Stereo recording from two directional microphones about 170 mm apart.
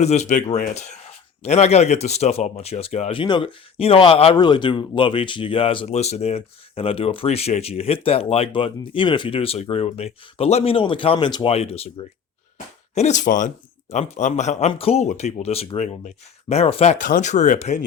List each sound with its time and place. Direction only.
0.0 s speech: 40° left (ahead or behind)
12.9 s a man's voice: 40° left (ahead or behind)